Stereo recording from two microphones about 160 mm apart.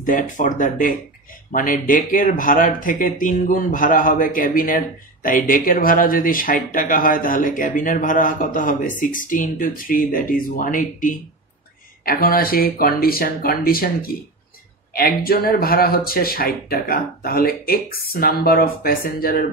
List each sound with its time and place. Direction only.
0.0 s speech: 55° left (ahead or behind)
12.0 s speech: 70° left (ahead or behind)